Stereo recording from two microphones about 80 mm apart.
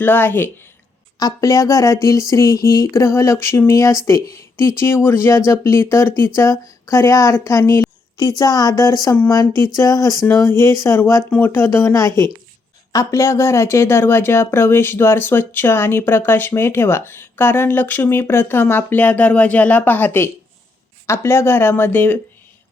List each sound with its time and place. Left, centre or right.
0.0 s speech: left
1.2 s speech: left
8.1 s speech: left
10.2 s speech: left